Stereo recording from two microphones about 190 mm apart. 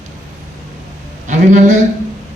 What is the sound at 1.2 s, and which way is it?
Speech, 40° right (ahead or behind).